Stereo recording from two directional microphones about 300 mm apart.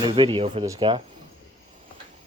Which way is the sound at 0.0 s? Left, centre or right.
Centre.